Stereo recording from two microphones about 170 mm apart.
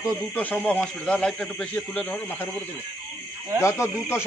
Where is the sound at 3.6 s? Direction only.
15° left (ahead or behind).